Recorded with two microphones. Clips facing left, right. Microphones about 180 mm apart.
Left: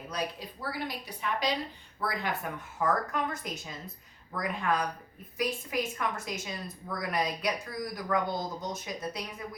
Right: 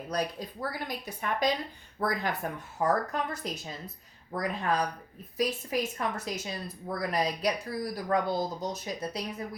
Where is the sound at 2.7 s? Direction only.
35° right (ahead or behind).